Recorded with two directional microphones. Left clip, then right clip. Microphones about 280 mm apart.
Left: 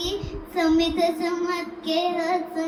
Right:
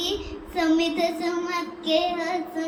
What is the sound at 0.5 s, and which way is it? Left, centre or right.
Speech, centre.